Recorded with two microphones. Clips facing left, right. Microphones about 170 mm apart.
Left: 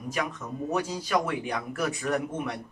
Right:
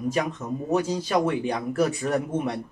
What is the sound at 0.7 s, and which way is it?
Speech, 25° right (ahead or behind).